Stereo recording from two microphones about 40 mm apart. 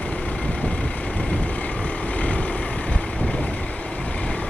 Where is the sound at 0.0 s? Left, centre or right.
Left.